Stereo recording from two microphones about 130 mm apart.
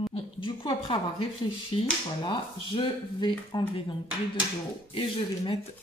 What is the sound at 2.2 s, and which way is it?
Speech, 40° left (ahead or behind).